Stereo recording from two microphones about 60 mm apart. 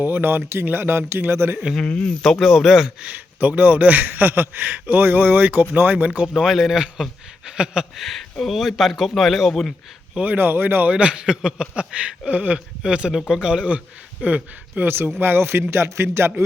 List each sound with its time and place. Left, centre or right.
0.0 s speech: right
1.8 s speech: centre
2.2 s speech: centre
3.0 s a man's voice: right
6.2 s speech: centre
7.9 s speech: centre
10.3 s speech: right
10.9 s speech: centre
14.8 s speech: right